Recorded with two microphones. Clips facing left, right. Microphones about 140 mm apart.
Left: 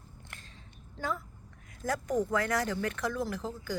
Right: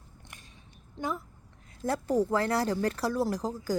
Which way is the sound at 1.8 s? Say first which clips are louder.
Right 3 dB; 30° right (ahead or behind).